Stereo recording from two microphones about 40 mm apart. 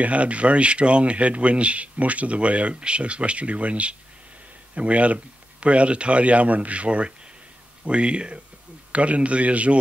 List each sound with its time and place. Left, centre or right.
0.0 s speech: right